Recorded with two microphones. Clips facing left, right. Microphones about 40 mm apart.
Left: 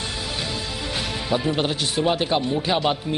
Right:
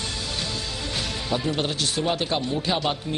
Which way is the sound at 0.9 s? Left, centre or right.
Centre.